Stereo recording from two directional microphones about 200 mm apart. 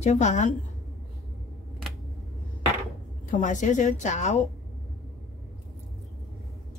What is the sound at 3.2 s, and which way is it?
A woman's voice, 40° left (ahead or behind).